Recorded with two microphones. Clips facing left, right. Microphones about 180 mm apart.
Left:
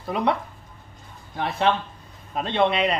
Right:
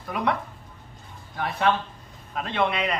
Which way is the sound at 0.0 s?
25° left (ahead or behind).